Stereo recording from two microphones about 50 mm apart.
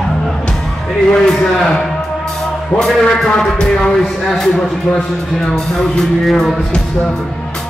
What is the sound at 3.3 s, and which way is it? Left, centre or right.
Speech, centre.